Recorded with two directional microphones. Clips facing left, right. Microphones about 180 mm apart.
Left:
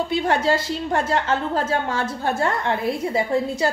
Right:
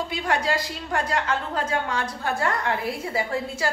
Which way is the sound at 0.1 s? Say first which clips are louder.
Left 6 dB; 25° left (ahead or behind).